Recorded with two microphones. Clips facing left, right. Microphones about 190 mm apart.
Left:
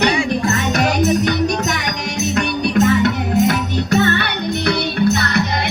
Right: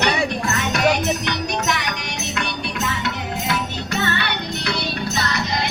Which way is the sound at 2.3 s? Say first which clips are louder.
Left 11 dB; 50° left (ahead or behind).